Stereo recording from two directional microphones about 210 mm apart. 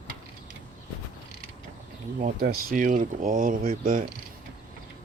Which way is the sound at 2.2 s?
45° right (ahead or behind).